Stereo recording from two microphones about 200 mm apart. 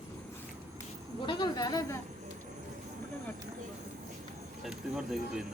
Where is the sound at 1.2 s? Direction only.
20° left (ahead or behind).